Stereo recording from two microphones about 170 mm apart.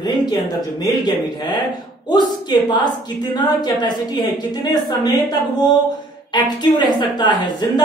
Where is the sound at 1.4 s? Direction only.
25° left (ahead or behind).